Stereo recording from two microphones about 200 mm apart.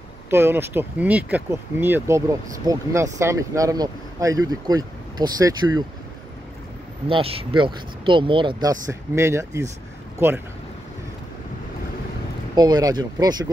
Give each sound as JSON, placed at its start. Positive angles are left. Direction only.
{"t": 0.3, "sound": "speech", "side_deg": -10}
{"t": 7.1, "sound": "speech", "side_deg": -30}
{"t": 12.5, "sound": "speech", "side_deg": -20}